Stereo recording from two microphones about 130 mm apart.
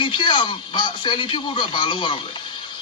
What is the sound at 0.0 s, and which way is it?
A man's voice, 40° left (ahead or behind).